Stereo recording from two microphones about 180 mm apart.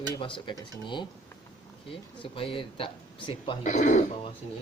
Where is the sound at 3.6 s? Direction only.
45° left (ahead or behind).